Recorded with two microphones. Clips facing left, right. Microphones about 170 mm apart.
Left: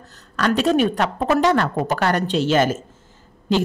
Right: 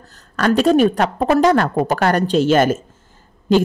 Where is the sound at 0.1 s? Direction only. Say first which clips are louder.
Right 4 dB; 45° right (ahead or behind).